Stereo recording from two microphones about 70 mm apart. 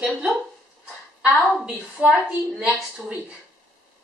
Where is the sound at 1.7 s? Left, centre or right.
Centre.